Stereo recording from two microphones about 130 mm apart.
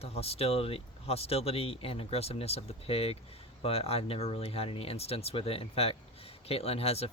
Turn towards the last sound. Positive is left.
turn(degrees=50)  # may be behind; listen again after turning